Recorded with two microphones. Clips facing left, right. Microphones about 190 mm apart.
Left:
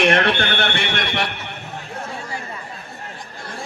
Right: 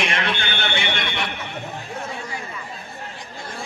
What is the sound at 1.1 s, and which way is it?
Neigh, 70° left (ahead or behind).